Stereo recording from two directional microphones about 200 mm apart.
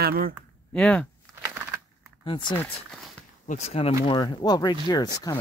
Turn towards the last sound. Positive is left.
turn(degrees=20)  # may be behind; listen again after turning